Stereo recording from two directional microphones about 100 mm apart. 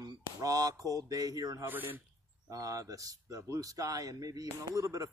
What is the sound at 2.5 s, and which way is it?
Speech, 35° right (ahead or behind).